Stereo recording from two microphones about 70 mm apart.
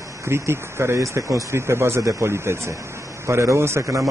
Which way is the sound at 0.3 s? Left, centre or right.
Right.